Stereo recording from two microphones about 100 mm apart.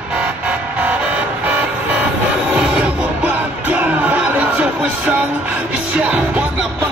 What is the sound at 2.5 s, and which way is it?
Music, 10° right (ahead or behind).